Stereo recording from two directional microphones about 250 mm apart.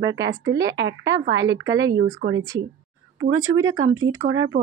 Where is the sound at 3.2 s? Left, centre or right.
Right.